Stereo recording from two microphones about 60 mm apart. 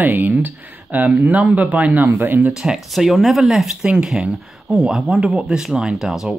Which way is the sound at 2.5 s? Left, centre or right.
Centre.